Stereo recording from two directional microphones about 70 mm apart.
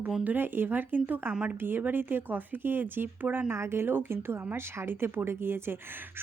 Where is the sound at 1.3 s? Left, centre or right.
Centre.